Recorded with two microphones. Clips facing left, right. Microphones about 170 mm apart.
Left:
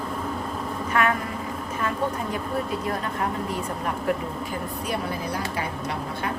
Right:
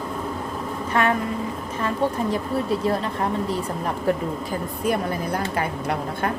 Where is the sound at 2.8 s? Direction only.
30° right (ahead or behind).